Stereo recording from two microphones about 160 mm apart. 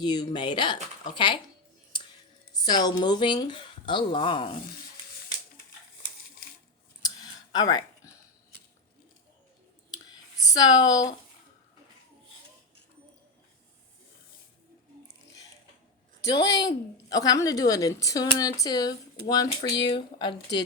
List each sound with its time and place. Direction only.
0.0 s a woman's voice: 25° left (ahead or behind)
2.5 s a woman's voice: 25° left (ahead or behind)
7.0 s a sound: 25° left (ahead or behind)
10.3 s speech: 25° left (ahead or behind)
16.3 s a woman's voice: 25° left (ahead or behind)